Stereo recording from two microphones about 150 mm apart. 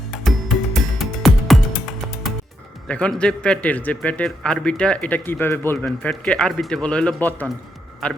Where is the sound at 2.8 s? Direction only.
5° left (ahead or behind).